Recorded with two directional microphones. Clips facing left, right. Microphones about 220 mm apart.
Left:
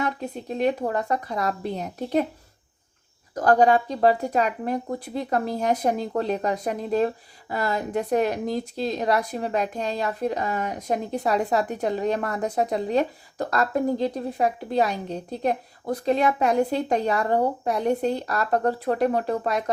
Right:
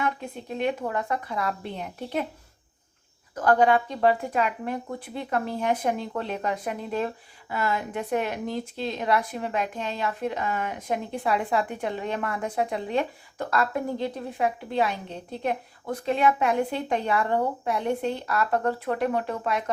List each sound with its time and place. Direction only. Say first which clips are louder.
0.0 s speech: left 2 dB; 35° left (ahead or behind)
3.3 s speech: left 2 dB; 40° left (ahead or behind)